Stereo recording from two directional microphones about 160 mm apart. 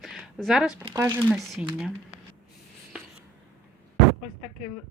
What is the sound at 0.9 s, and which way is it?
Speech, 15° right (ahead or behind).